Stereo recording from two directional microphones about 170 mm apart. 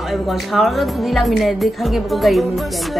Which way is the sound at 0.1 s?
Centre (ahead or behind).